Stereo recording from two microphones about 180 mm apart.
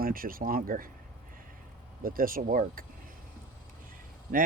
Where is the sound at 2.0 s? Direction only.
50° right (ahead or behind).